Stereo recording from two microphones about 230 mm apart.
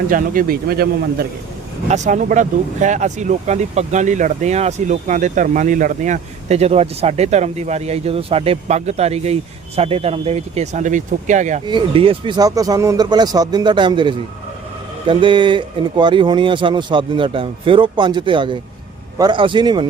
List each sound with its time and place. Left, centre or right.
0.1 s speech: right; by 19.9 s centre